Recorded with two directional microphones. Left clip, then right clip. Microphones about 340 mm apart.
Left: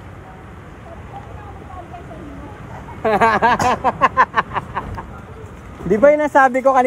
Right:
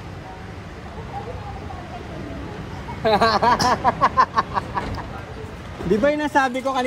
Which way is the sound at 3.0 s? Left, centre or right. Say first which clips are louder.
Left 3 dB; left.